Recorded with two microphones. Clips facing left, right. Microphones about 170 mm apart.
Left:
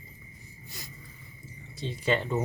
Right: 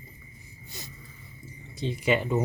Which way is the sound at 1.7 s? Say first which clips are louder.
Right 3 dB; 15° right (ahead or behind).